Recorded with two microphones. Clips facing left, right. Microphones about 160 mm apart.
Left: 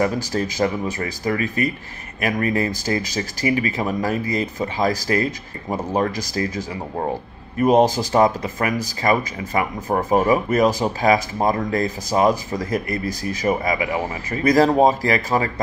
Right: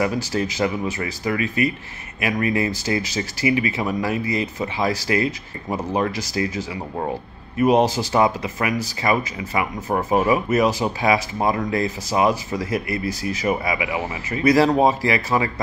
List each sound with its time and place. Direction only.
0.0 s speech: 40° left (ahead or behind)
5.7 s speech: 10° left (ahead or behind)
5.9 s speech: 40° left (ahead or behind)